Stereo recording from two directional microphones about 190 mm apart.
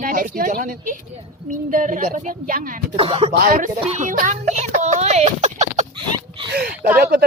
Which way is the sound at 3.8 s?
40° right (ahead or behind).